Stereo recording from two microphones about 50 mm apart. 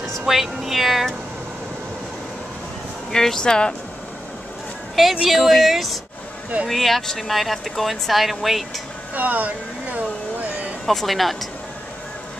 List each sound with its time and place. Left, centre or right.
0.3 s speech: centre
3.1 s speech: centre
5.0 s speech: centre
9.1 s a sound: right
10.9 s speech: centre